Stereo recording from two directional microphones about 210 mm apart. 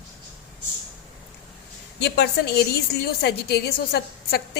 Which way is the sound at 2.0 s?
50° left (ahead or behind).